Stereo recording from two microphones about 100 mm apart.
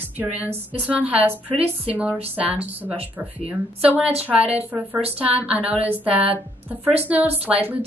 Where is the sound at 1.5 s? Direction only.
80° right.